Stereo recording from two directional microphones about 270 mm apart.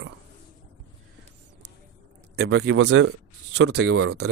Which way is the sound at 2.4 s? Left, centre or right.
Right.